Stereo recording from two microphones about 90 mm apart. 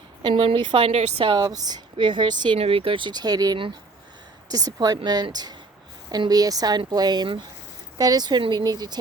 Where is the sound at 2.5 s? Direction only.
90° right.